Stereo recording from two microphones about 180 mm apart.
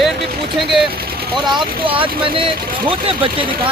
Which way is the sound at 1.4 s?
25° right (ahead or behind).